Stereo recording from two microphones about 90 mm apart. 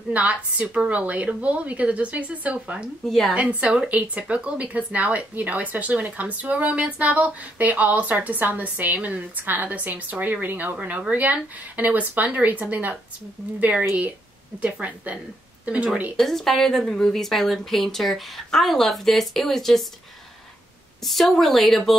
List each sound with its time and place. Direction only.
0.1 s speech: 15° right (ahead or behind)
3.1 s a woman's voice: centre (ahead or behind)
3.3 s speech: 15° right (ahead or behind)
16.2 s a woman's voice: centre (ahead or behind)
21.0 s a woman's voice: centre (ahead or behind)